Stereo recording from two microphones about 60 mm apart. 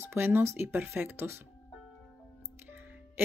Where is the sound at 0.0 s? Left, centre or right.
Right.